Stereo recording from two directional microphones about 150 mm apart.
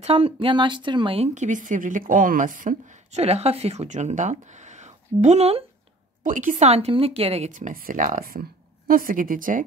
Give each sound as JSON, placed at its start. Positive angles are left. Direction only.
{"t": 0.0, "sound": "speech", "side_deg": -40}
{"t": 6.2, "sound": "speech", "side_deg": -55}